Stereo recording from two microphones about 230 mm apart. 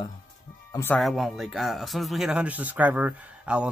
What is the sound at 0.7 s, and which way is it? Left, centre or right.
Speech, centre.